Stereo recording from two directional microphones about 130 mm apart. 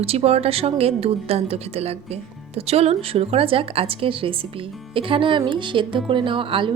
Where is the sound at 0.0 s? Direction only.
50° right (ahead or behind).